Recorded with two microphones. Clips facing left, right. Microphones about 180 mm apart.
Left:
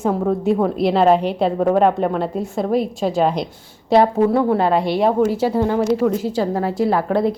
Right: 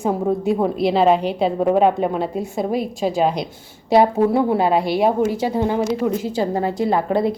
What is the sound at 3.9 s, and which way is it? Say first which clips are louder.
A woman's voice: left 1 dB; 10° right (ahead or behind).